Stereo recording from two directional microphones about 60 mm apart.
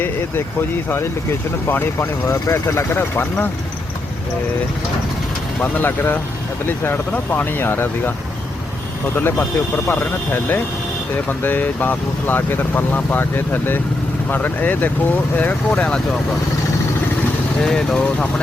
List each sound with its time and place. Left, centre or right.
1.7 s speech: left
2.2 s speech: left
5.5 s speech: left
9.9 s speech: left; by 16.0 s centre
17.6 s speech: centre